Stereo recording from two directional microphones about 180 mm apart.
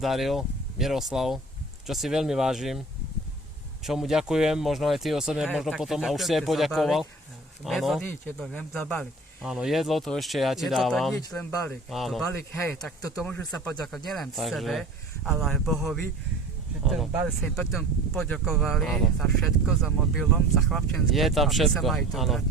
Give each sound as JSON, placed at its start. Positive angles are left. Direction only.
{"t": 0.0, "sound": "speech", "side_deg": 0}
{"t": 3.8, "sound": "speech", "side_deg": 0}
{"t": 9.5, "sound": "speech", "side_deg": 0}
{"t": 11.3, "sound": "speech", "side_deg": 15}
{"t": 11.9, "sound": "speech", "side_deg": 0}
{"t": 12.3, "sound": "speech", "side_deg": 15}